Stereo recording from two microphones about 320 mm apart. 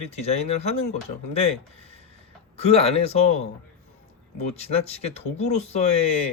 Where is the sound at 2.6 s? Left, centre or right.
Centre.